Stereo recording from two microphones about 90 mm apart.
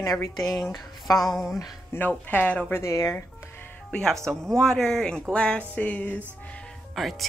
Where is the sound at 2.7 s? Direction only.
30° left (ahead or behind).